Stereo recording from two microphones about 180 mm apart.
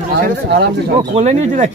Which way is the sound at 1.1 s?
40° right (ahead or behind).